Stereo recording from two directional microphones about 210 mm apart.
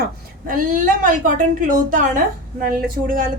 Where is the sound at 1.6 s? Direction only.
40° right (ahead or behind).